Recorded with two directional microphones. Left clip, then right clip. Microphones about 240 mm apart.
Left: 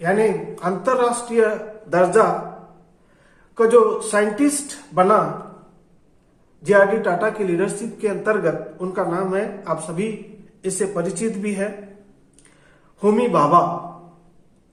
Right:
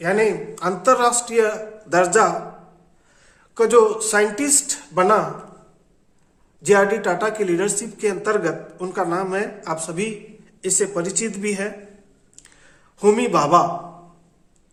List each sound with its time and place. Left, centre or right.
0.0 s speech: right
3.5 s speech: right
6.6 s speech: right
13.0 s speech: right